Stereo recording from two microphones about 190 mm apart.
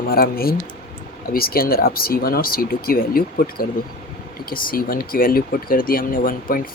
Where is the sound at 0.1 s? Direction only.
50° left (ahead or behind).